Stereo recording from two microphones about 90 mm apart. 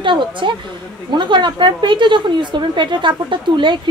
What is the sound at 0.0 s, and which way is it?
A woman's voice, 65° right (ahead or behind).